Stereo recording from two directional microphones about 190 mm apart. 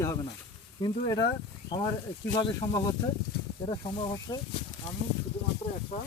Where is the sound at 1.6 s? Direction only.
25° left (ahead or behind).